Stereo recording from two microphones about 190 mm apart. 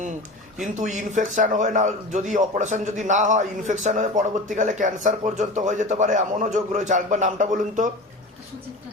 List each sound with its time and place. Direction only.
0.8 s a man's voice: 40° right (ahead or behind)